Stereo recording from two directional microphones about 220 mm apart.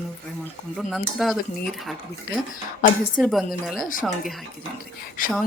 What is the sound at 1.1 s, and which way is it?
Speech, centre (ahead or behind).